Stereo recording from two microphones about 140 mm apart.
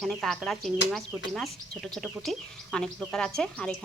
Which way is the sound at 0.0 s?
5° left (ahead or behind).